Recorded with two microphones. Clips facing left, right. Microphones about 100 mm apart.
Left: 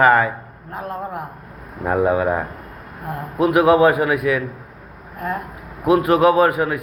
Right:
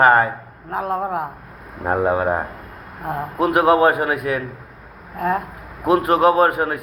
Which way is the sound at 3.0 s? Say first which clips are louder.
Right 4 dB; 15° right (ahead or behind).